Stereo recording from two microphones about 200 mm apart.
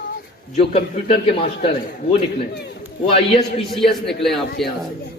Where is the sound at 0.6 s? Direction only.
30° left (ahead or behind).